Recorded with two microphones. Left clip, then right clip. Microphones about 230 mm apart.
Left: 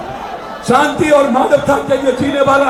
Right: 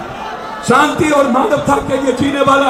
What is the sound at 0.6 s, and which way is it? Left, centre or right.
Speech, right.